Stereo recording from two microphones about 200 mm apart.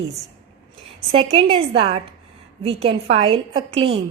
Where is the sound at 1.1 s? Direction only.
25° right (ahead or behind).